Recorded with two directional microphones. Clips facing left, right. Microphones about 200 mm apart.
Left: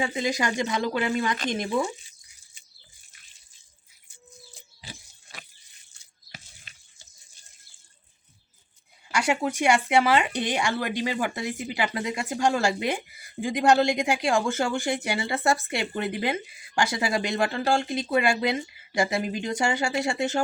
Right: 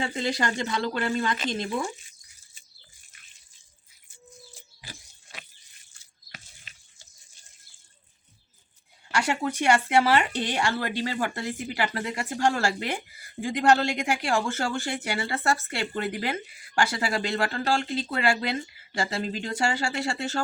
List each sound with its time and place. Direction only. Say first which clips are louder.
0.0 s speech: left 1 dB; 15° left (ahead or behind)
9.3 s speech: left 1 dB; 15° left (ahead or behind)